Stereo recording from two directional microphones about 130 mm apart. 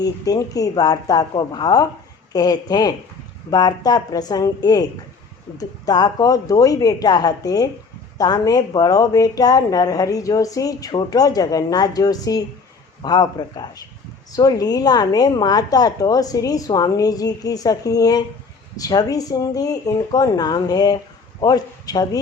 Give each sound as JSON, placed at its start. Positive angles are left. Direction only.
{"t": 0.0, "sound": "a woman's voice", "side_deg": 30}